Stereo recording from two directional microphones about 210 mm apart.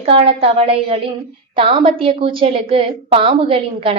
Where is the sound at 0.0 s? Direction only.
25° right (ahead or behind).